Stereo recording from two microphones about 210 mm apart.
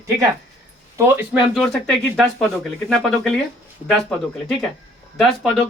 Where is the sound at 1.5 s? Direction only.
Centre (ahead or behind).